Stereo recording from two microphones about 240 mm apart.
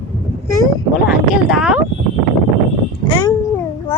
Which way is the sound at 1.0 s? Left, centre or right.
Centre.